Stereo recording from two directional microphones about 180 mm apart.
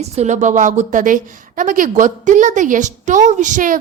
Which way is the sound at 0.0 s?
40° right (ahead or behind).